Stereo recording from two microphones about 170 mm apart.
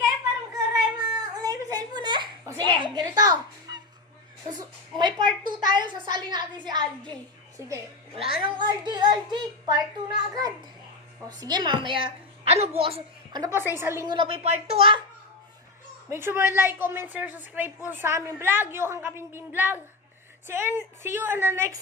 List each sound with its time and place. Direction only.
0.9 s a sound: 20° right (ahead or behind)
8.1 s a woman's voice: 30° right (ahead or behind)
13.4 s a woman's voice: 15° right (ahead or behind)
14.1 s speech: 30° right (ahead or behind)
16.0 s a woman's voice: 15° right (ahead or behind)